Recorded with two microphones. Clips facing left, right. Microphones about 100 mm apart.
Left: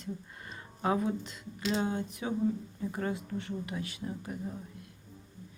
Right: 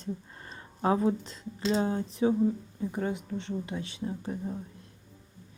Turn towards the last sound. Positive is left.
turn(degrees=-25)  # may be behind; listen again after turning